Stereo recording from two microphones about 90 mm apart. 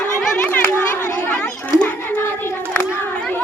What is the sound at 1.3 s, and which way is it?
Children playing, 10° left (ahead or behind).